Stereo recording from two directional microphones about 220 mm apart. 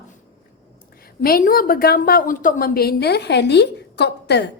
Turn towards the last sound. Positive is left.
turn(degrees=50)  # may be behind; listen again after turning